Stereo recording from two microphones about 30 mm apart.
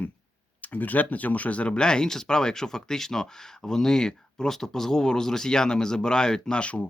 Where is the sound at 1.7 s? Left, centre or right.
Left.